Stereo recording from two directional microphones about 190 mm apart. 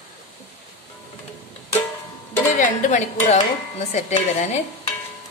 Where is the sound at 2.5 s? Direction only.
40° left (ahead or behind).